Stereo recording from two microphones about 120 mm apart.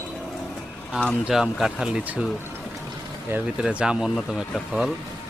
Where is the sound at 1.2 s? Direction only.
5° right (ahead or behind).